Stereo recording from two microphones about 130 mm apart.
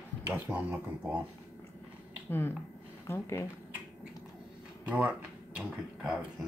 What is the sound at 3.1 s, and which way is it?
Speech, 20° left (ahead or behind).